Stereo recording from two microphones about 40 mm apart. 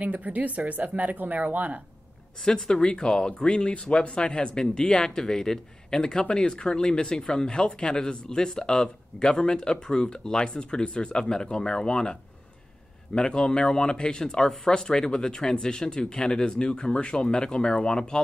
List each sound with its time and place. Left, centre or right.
0.0 s speech: right
2.7 s speech: left